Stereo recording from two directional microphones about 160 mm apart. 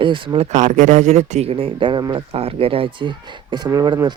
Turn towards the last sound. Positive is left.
turn(degrees=-25)  # may be behind; listen again after turning